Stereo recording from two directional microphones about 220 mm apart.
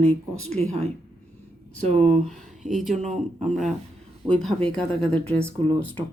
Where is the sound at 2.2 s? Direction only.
Centre (ahead or behind).